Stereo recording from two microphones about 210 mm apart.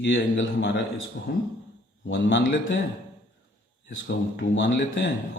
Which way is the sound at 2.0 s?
60° left (ahead or behind).